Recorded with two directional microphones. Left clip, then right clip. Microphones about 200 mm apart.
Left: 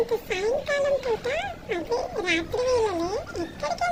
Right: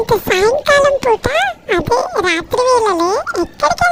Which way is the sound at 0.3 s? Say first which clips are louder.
Right 14 dB; 60° right (ahead or behind).